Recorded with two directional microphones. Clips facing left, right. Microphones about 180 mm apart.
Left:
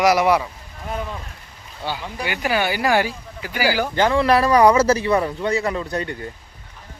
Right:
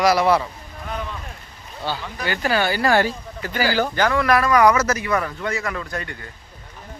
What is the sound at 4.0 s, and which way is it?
Speech, 25° left (ahead or behind).